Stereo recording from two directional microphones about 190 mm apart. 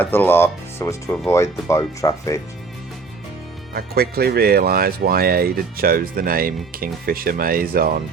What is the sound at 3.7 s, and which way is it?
Speech, 55° right (ahead or behind).